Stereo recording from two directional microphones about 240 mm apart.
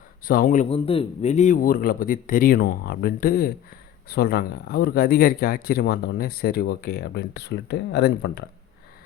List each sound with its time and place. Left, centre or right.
0.3 s speech: left